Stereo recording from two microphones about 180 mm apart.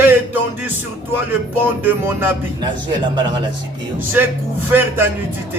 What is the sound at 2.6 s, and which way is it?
Speech, 25° right (ahead or behind).